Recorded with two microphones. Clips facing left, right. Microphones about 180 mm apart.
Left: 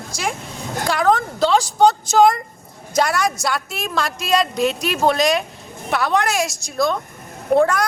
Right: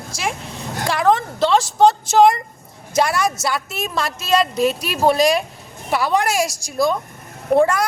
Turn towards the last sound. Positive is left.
turn(degrees=-10)  # may be behind; listen again after turning